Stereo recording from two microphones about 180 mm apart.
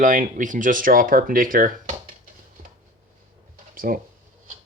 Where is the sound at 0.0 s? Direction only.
45° right (ahead or behind).